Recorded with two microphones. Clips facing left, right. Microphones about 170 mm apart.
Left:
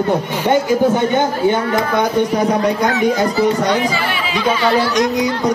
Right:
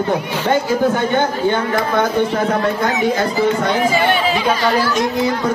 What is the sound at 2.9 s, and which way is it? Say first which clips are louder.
Speech: left 2 dB; 20° right (ahead or behind).